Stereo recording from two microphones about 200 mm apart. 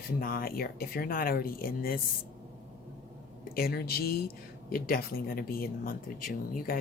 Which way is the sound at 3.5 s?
50° left (ahead or behind).